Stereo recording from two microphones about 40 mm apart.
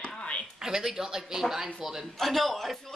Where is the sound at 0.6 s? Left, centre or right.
Centre.